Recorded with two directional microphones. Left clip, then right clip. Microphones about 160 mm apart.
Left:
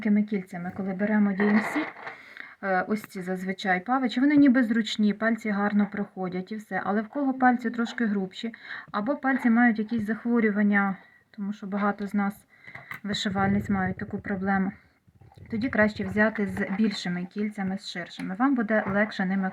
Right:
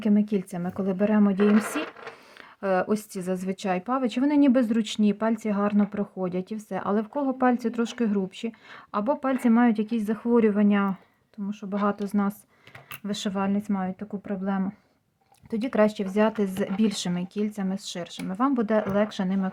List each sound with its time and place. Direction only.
0.0 s speech: 50° right (ahead or behind)
2.6 s speech: 45° right (ahead or behind)
11.7 s speech: 30° right (ahead or behind)
13.1 s speech: 30° right (ahead or behind)
15.4 s speech: 35° right (ahead or behind)